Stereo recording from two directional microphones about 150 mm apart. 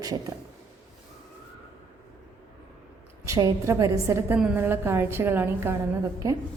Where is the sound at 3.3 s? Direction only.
20° right (ahead or behind).